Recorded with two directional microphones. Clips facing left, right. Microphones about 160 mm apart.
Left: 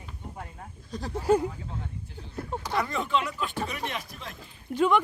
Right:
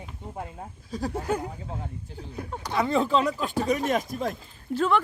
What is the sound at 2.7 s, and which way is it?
Speech, 25° right (ahead or behind).